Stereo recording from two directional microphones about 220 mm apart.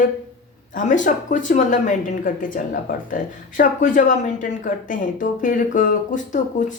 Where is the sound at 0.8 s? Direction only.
35° left (ahead or behind).